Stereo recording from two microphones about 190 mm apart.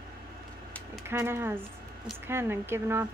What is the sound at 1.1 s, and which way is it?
Speech, 15° right (ahead or behind).